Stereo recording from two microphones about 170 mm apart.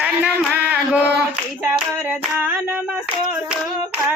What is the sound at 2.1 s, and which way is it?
Hands, 10° right (ahead or behind).